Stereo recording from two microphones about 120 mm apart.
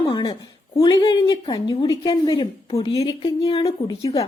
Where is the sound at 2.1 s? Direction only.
45° left (ahead or behind).